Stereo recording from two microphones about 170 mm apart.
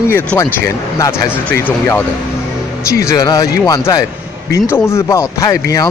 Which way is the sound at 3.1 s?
20° left (ahead or behind).